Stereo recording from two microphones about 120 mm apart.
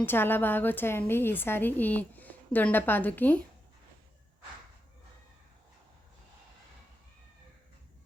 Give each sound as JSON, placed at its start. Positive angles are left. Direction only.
{"t": 0.0, "sound": "a woman's voice", "side_deg": 15}